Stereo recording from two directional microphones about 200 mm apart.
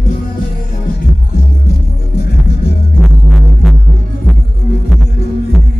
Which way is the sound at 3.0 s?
Centre (ahead or behind).